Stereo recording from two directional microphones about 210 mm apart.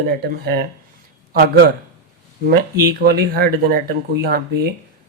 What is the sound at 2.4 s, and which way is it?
Speech, 45° right (ahead or behind).